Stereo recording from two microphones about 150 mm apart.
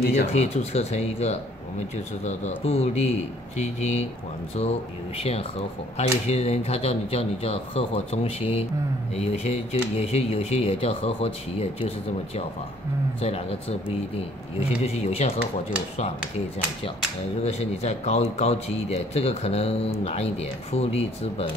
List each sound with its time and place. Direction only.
0.3 s speech: 45° left (ahead or behind)
13.2 s speech: 40° left (ahead or behind)